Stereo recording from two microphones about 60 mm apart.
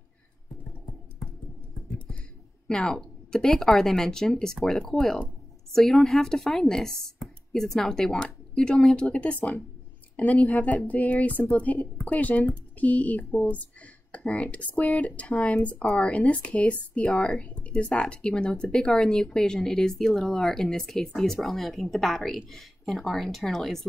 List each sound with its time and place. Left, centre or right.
2.7 s speech: centre